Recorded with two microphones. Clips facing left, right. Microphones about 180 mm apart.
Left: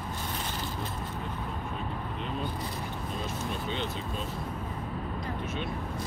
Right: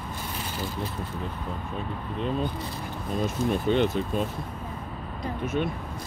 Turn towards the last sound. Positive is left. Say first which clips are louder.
# right 10 dB
turn(degrees=-60)  # may be behind; listen again after turning